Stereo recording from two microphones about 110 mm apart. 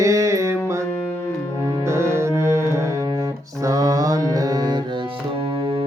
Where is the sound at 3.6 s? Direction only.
35° right (ahead or behind).